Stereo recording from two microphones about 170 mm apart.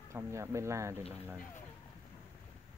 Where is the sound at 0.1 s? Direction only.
15° right (ahead or behind).